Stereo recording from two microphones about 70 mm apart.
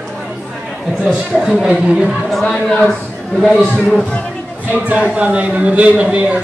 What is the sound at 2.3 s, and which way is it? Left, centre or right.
Speech, centre.